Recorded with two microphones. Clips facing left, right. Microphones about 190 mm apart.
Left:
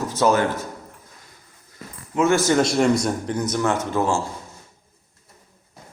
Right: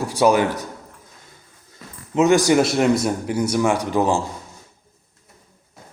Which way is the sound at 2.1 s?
15° right (ahead or behind).